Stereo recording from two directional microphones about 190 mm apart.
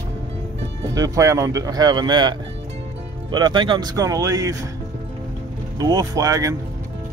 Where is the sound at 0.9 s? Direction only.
20° right (ahead or behind).